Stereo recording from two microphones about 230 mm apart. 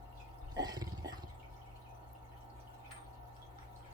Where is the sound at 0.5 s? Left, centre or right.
Centre.